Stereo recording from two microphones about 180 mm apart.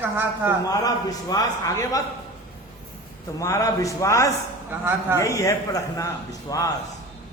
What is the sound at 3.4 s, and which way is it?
Speech, 20° left (ahead or behind).